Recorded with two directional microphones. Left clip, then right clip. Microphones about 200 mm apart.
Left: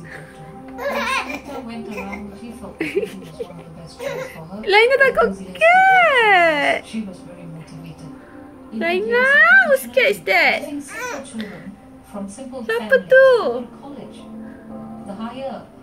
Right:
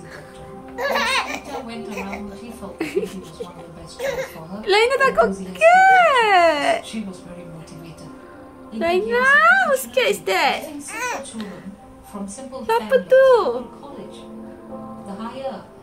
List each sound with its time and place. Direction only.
0.7 s music: 10° right (ahead or behind)
2.8 s a sound: centre (ahead or behind)
4.6 s baby cry: centre (ahead or behind)
8.7 s a woman's voice: centre (ahead or behind)
10.9 s a sound: 15° right (ahead or behind)
12.6 s a woman's voice: centre (ahead or behind)